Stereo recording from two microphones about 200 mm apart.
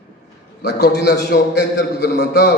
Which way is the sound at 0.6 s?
55° left (ahead or behind).